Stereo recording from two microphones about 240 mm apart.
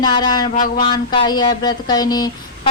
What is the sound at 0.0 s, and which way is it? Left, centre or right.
Speech, centre.